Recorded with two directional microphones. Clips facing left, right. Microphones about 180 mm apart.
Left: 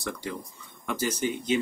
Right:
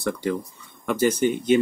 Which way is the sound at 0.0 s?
55° right (ahead or behind).